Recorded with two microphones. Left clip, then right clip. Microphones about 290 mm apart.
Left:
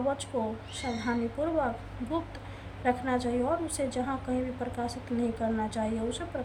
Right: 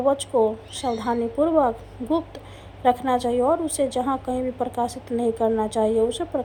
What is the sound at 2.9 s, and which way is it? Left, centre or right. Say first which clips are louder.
A woman's voice: right 9 dB; centre.